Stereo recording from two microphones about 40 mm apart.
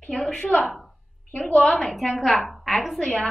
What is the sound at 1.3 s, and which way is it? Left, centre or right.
Speech, left.